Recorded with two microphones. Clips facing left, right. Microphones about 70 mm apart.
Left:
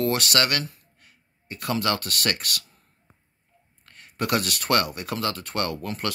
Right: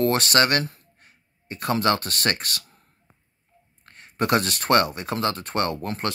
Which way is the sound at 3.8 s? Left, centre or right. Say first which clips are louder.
Right 4 dB; right.